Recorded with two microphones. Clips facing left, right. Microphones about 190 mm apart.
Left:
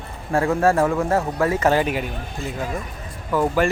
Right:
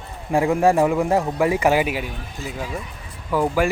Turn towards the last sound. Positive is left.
turn(degrees=-10)  # may be behind; listen again after turning